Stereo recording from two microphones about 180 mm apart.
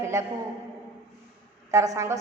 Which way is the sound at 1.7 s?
15° right (ahead or behind).